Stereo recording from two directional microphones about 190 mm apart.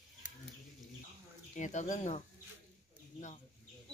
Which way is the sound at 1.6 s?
40° left (ahead or behind).